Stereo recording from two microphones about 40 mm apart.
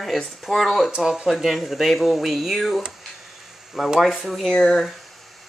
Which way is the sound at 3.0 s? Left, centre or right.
Centre.